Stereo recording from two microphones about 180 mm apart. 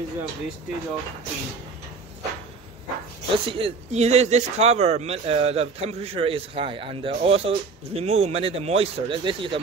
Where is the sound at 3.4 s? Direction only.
30° right (ahead or behind).